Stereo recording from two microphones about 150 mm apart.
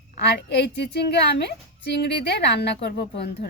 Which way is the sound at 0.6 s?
90° left.